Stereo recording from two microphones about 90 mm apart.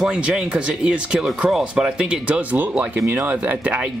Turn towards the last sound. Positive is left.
turn(degrees=-15)  # may be behind; listen again after turning